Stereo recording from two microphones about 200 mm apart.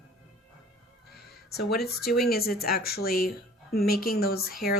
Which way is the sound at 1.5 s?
50° left (ahead or behind).